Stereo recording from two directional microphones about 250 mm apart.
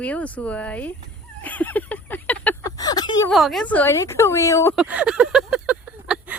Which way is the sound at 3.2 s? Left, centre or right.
Centre.